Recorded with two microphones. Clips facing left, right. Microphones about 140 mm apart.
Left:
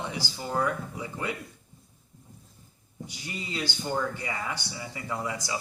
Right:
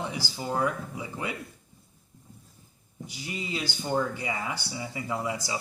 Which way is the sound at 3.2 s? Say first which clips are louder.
Right 1 dB; 10° right (ahead or behind).